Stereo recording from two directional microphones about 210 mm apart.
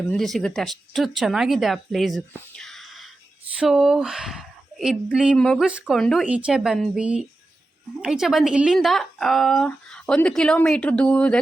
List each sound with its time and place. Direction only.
0.1 s speech: centre (ahead or behind)
2.6 s a sound: centre (ahead or behind)
3.6 s speech: centre (ahead or behind)